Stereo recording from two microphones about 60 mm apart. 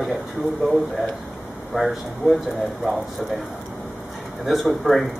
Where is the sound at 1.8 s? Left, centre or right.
Centre.